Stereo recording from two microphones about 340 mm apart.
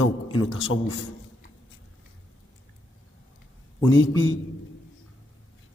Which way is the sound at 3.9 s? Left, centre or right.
Left.